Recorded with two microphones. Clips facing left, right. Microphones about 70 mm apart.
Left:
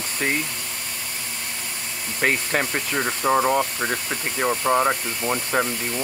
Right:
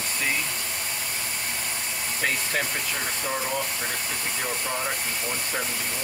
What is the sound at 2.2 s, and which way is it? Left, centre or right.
Speech, left.